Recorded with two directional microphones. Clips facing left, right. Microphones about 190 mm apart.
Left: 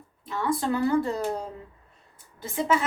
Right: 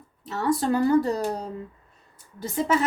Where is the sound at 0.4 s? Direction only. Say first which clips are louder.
Right 3 dB; 40° right (ahead or behind).